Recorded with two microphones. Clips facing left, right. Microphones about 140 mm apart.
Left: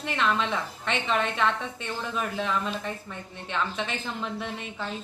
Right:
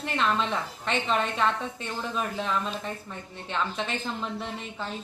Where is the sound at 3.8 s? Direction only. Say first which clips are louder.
Right 1 dB; centre (ahead or behind).